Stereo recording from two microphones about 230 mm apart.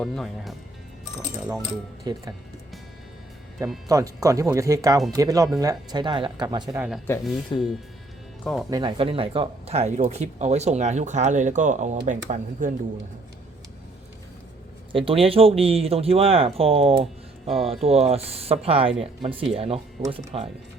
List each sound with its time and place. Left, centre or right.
0.0 s speech: centre
2.1 s speech: centre
3.8 s speech: centre
6.7 s speech: centre
7.5 s speech: centre
8.7 s speech: right
14.9 s speech: right